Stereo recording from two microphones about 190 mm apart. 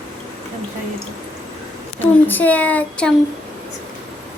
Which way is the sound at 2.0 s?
10° left (ahead or behind).